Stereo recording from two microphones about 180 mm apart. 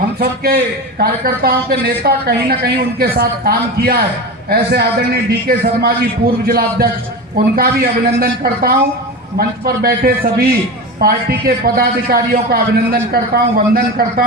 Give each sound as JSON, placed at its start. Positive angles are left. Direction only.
{"t": 0.2, "sound": "a man's voice", "side_deg": -55}